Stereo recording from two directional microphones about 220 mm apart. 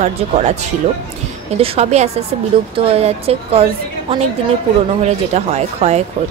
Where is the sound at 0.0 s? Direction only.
30° right (ahead or behind).